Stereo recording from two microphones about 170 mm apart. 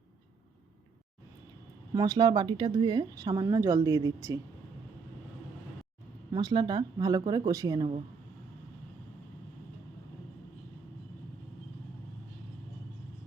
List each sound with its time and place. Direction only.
1.9 s speech: 25° right (ahead or behind)
6.3 s speech: 25° right (ahead or behind)